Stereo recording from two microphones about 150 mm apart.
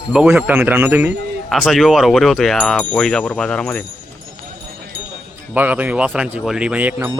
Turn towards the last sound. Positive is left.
turn(degrees=-10)  # may be behind; listen again after turning